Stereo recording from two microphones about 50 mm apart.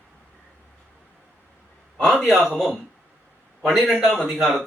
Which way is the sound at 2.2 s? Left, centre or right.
Centre.